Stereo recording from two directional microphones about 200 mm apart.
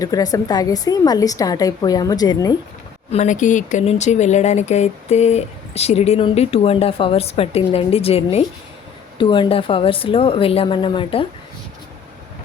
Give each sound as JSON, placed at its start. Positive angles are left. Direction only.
{"t": 0.0, "sound": "a woman's voice", "side_deg": 20}
{"t": 3.1, "sound": "a woman's voice", "side_deg": 35}